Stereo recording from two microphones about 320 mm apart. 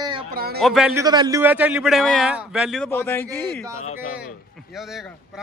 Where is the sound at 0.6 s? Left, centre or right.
Centre.